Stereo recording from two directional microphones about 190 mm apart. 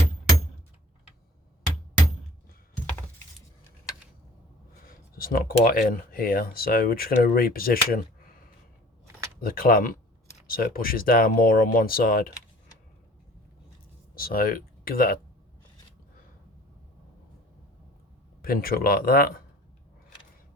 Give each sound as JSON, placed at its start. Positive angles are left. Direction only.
{"t": 5.1, "sound": "speech", "side_deg": 50}
{"t": 9.4, "sound": "speech", "side_deg": 50}
{"t": 14.2, "sound": "speech", "side_deg": 50}
{"t": 18.4, "sound": "speech", "side_deg": 50}